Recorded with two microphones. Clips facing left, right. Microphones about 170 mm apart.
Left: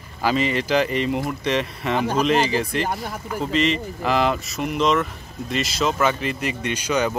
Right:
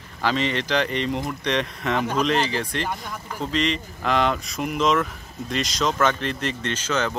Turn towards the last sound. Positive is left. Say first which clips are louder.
# left 3 dB
turn(degrees=10)  # may be behind; listen again after turning